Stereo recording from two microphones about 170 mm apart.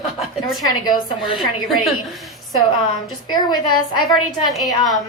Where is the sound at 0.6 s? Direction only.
25° left (ahead or behind).